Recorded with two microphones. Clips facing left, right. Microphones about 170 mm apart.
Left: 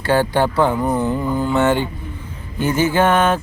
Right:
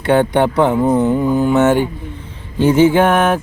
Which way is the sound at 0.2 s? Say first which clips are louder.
Right 3 dB; 20° right (ahead or behind).